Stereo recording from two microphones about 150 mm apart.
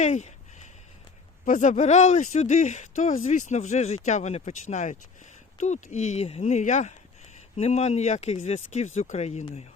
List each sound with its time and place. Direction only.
0.0 s speech: 50° left (ahead or behind)
1.5 s speech: 55° left (ahead or behind)